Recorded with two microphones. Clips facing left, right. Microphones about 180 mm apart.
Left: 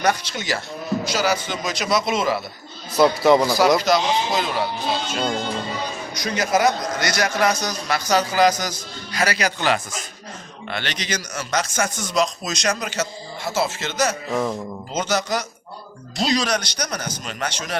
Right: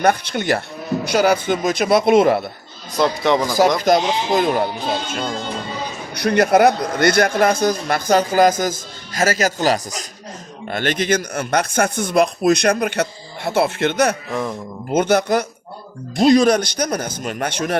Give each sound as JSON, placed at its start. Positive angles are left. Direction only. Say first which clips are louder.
{"t": 0.0, "sound": "speech", "louder": "right 5 dB", "side_deg": -55}
{"t": 3.0, "sound": "speech", "louder": "left 2 dB", "side_deg": 5}
{"t": 3.8, "sound": "a man's voice", "louder": "right 3 dB", "side_deg": -50}
{"t": 6.1, "sound": "a man's voice", "louder": "right 7 dB", "side_deg": -60}